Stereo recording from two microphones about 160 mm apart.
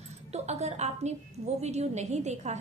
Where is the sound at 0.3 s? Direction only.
40° right (ahead or behind).